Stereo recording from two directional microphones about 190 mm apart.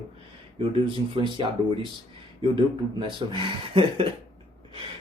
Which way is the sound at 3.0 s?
25° right (ahead or behind).